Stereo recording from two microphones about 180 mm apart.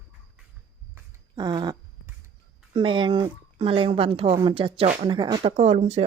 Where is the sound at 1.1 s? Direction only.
25° right (ahead or behind).